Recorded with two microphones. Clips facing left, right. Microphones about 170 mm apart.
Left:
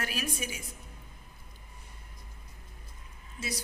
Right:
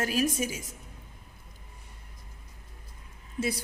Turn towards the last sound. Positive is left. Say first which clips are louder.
# right 8 dB
turn(degrees=-55)  # may be behind; listen again after turning